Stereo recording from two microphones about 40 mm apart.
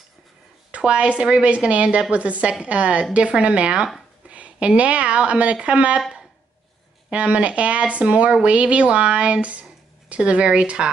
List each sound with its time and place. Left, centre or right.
0.7 s a woman's voice: right
7.1 s speech: right